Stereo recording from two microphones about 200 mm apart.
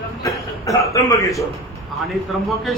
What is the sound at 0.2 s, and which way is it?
A man's voice, 15° left (ahead or behind).